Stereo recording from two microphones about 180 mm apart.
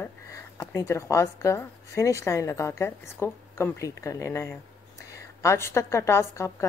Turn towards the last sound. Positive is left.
turn(degrees=15)  # may be behind; listen again after turning